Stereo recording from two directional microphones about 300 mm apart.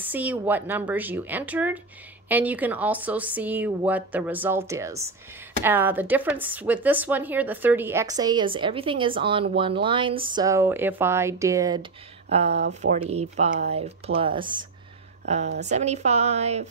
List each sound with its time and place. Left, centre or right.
0.0 s speech: centre; by 12.5 s right
12.5 s speech: right
13.1 s a woman's voice: right